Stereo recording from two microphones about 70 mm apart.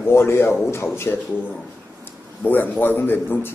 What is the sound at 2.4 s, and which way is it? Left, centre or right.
Speech, left.